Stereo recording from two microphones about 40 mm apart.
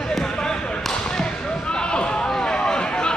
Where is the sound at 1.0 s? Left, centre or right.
Left.